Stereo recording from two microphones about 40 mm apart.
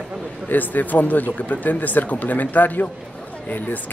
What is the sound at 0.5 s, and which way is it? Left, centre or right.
Speech, left.